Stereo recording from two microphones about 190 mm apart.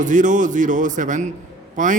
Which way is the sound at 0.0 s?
40° right (ahead or behind).